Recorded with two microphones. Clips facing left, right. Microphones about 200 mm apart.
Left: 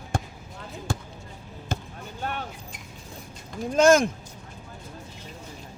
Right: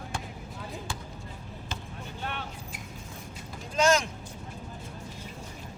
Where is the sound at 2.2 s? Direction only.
45° left (ahead or behind).